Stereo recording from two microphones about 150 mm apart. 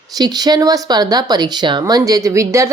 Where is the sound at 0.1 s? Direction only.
25° right (ahead or behind).